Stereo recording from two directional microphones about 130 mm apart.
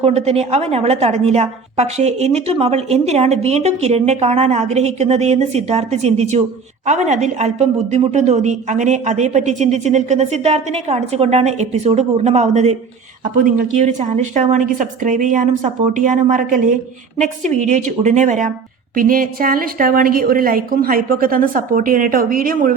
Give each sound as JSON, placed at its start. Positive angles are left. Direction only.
{"t": 0.0, "sound": "a woman's voice", "side_deg": -55}
{"t": 13.2, "sound": "a woman's voice", "side_deg": -90}
{"t": 17.2, "sound": "a woman's voice", "side_deg": -65}
{"t": 18.9, "sound": "a woman's voice", "side_deg": -90}